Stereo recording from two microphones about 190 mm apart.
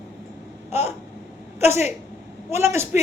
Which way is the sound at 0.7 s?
10° right (ahead or behind).